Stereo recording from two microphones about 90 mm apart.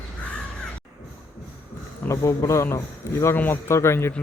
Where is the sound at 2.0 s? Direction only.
40° left (ahead or behind).